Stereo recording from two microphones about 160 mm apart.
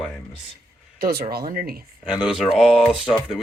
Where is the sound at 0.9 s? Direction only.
75° right (ahead or behind).